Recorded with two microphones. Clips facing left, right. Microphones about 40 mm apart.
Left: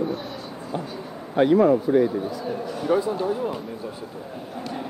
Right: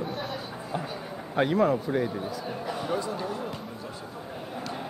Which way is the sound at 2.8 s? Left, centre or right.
Centre.